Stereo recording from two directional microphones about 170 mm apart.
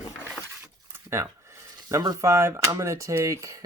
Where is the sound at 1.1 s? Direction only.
15° right (ahead or behind).